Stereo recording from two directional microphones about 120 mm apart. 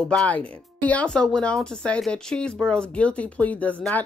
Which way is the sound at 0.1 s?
10° left (ahead or behind).